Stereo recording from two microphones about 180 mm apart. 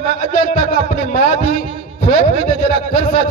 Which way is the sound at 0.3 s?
50° left (ahead or behind).